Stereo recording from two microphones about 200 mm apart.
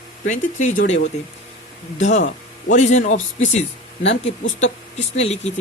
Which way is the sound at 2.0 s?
35° left (ahead or behind).